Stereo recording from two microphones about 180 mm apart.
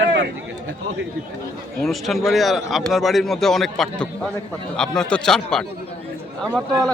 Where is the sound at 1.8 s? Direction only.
Centre (ahead or behind).